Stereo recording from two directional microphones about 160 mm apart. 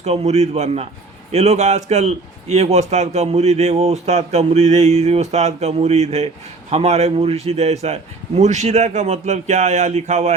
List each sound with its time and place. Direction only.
0.0 s a man's voice: 40° right (ahead or behind)